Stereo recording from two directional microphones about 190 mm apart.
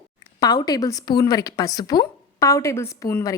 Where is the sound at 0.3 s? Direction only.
20° left (ahead or behind).